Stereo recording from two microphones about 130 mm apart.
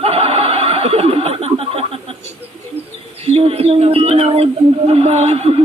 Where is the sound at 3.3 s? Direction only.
50° right (ahead or behind).